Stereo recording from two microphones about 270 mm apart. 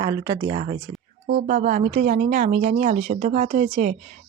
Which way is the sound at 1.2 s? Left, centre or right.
Right.